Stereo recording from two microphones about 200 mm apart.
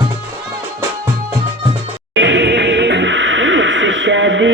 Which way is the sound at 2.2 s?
60° right (ahead or behind).